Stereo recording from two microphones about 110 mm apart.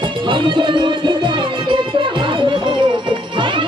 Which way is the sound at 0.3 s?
45° right (ahead or behind).